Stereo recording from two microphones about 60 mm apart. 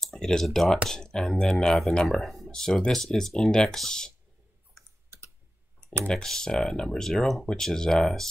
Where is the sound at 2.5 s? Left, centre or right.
Centre.